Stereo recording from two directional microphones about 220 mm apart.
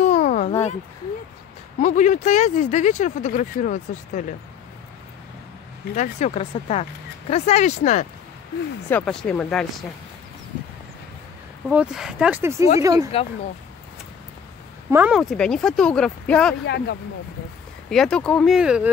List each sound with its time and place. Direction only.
0.0 s a sound: 35° left (ahead or behind)
1.8 s speech: 35° left (ahead or behind)
5.9 s speech: 30° left (ahead or behind)
8.8 s speech: 5° left (ahead or behind)
11.7 s speech: 5° right (ahead or behind)
14.9 s speech: 5° right (ahead or behind)
16.6 s speech: 50° left (ahead or behind)
17.8 s speech: centre (ahead or behind)